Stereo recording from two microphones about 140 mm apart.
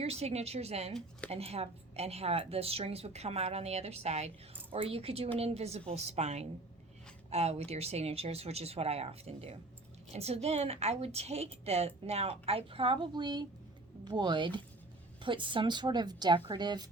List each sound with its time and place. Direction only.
0.0 s a woman's voice: 50° right (ahead or behind); by 16.8 s 30° right (ahead or behind)